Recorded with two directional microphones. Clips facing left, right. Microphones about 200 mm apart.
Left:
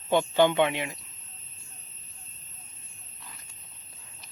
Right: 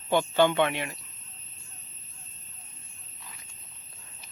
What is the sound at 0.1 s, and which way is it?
Speech, 15° left (ahead or behind).